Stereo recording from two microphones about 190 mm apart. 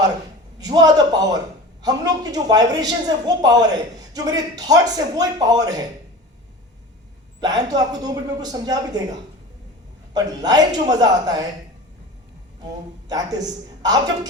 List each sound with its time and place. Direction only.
0.6 s a woman's voice: 20° right (ahead or behind)
7.4 s a woman's voice: 20° right (ahead or behind)
10.2 s a woman's voice: 20° right (ahead or behind)
13.1 s a woman's voice: 20° right (ahead or behind)